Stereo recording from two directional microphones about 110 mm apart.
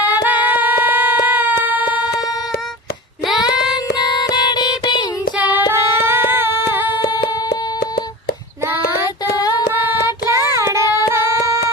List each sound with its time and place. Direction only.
0.0 s a sound: 15° right (ahead or behind)
4.2 s music: 40° left (ahead or behind)
5.4 s female singing: 15° right (ahead or behind)
9.5 s child singing: 15° right (ahead or behind)
11.1 s singing: 25° right (ahead or behind)